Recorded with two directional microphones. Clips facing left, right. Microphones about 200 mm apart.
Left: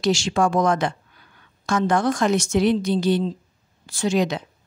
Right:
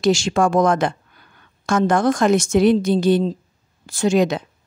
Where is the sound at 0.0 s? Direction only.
50° right (ahead or behind).